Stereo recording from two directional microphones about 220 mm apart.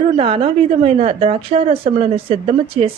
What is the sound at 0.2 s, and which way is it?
A woman's voice, 25° right (ahead or behind).